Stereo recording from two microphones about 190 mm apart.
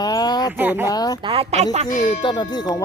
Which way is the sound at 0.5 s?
10° right (ahead or behind).